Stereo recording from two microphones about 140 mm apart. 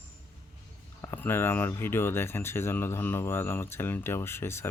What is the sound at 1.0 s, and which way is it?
Speech, 15° left (ahead or behind).